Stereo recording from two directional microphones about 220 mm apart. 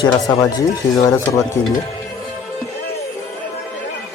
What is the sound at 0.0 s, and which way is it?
Speech, 15° left (ahead or behind).